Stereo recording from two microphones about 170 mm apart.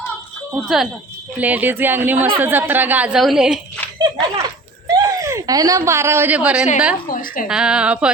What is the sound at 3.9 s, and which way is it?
Speech, 25° right (ahead or behind).